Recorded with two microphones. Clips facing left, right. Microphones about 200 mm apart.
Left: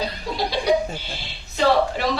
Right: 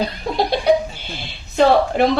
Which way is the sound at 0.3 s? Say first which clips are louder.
Right 7 dB; 55° right (ahead or behind).